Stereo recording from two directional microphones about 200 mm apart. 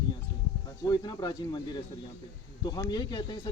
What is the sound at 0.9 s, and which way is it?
Speech, 20° left (ahead or behind).